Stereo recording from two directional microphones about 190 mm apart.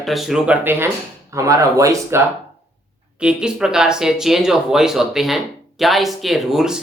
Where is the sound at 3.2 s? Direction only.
5° right (ahead or behind).